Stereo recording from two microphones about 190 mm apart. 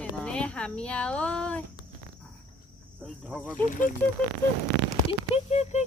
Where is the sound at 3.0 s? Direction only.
5° left (ahead or behind).